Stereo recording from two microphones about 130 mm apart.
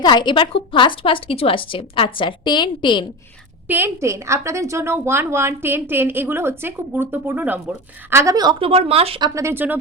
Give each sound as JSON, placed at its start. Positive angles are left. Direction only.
{"t": 0.0, "sound": "a woman's voice", "side_deg": 35}
{"t": 3.7, "sound": "a woman's voice", "side_deg": -15}
{"t": 8.5, "sound": "speech", "side_deg": -45}
{"t": 9.2, "sound": "speech", "side_deg": -25}